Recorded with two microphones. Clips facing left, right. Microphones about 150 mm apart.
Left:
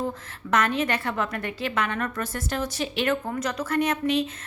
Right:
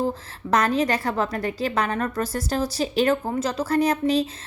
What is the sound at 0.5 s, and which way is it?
A woman's voice, 35° right (ahead or behind).